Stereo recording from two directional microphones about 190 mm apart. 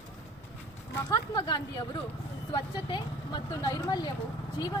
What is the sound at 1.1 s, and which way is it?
Speech, 20° left (ahead or behind).